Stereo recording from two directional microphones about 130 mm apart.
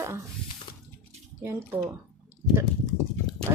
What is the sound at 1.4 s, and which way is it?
Speech, 20° right (ahead or behind).